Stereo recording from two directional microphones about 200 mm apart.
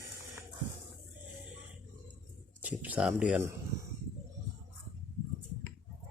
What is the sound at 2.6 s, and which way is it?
Speech, 5° right (ahead or behind).